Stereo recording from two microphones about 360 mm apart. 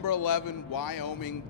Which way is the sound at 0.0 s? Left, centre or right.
Left.